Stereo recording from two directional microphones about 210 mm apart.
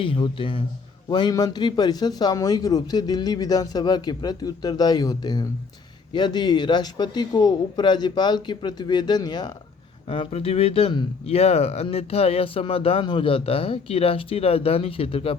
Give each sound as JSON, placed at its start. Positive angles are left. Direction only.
{"t": 0.0, "sound": "speech", "side_deg": 25}